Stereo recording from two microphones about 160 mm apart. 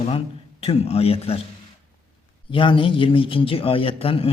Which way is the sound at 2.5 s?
30° left (ahead or behind).